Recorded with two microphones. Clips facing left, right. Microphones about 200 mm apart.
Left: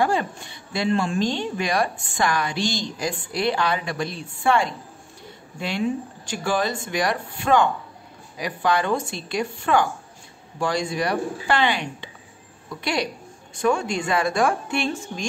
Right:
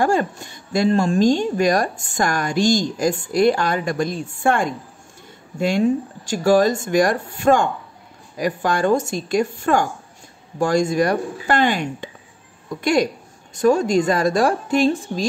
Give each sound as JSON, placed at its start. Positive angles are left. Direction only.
{"t": 0.0, "sound": "a woman's voice", "side_deg": -45}